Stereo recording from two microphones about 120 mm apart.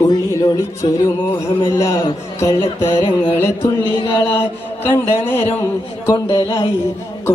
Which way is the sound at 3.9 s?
45° left (ahead or behind).